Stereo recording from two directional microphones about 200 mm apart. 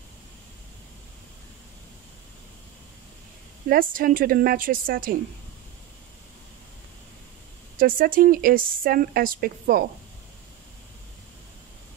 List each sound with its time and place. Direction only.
3.6 s speech: 45° right (ahead or behind)
7.8 s speech: 45° right (ahead or behind)